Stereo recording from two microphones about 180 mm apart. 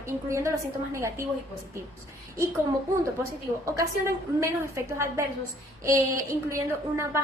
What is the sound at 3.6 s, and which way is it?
A woman's voice, 15° right (ahead or behind).